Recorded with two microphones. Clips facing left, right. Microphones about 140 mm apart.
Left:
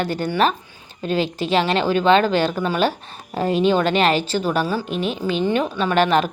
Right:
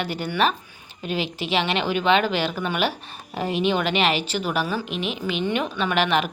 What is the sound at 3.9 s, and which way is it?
Speech, 10° right (ahead or behind).